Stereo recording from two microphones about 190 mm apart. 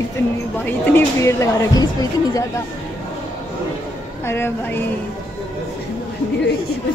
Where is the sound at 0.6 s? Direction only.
15° left (ahead or behind).